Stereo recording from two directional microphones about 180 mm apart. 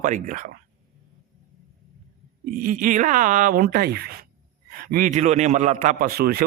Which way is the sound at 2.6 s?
50° right (ahead or behind).